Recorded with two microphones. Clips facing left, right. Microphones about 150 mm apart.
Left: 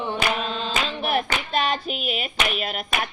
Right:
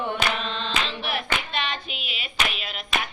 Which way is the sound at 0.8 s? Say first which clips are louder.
Left 6 dB; 40° left (ahead or behind).